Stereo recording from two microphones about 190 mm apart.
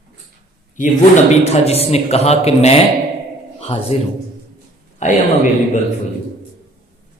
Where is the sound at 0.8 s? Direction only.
40° left (ahead or behind).